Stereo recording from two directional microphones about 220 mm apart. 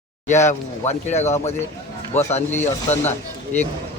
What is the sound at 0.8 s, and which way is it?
Speech, 30° left (ahead or behind).